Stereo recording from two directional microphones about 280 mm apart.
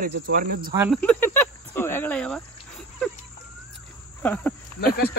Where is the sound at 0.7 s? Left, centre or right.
Centre.